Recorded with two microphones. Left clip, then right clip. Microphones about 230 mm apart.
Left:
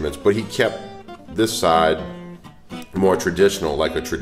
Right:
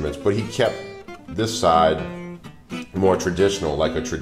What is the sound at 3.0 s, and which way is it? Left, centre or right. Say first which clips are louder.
Speech: left 2 dB; left.